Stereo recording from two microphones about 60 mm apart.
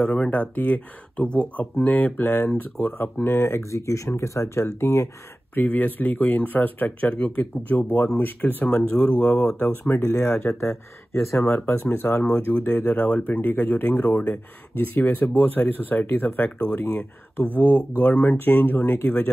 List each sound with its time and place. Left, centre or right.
0.0 s speech: centre; by 5.1 s left
5.5 s speech: left
9.6 s speech: left